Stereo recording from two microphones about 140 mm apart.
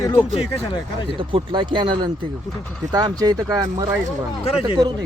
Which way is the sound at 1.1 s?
35° right (ahead or behind).